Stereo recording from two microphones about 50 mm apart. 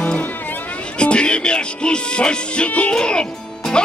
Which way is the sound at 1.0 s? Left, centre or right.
Left.